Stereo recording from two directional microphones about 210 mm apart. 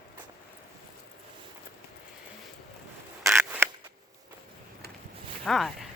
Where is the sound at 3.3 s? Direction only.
10° right (ahead or behind).